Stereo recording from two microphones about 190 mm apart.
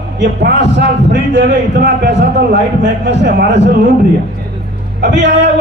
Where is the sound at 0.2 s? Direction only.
65° right (ahead or behind).